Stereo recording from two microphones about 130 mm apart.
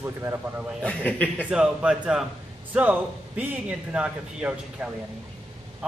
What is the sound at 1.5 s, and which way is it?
A man's voice, 5° right (ahead or behind).